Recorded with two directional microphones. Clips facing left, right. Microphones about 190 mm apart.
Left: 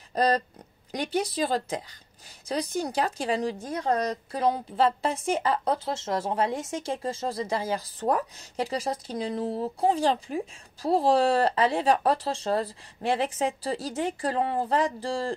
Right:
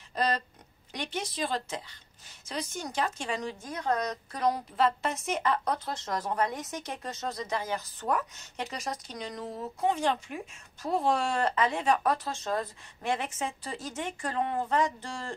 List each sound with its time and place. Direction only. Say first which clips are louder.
0.1 s speech: left 6 dB; 40° left (ahead or behind)